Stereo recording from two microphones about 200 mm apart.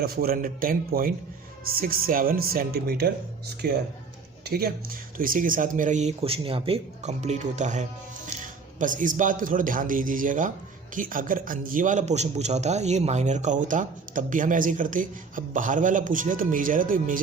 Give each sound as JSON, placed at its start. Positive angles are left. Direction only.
{"t": 0.0, "sound": "a man's voice", "side_deg": -50}